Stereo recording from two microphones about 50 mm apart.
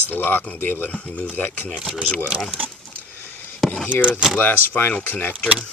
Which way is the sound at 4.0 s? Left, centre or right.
Right.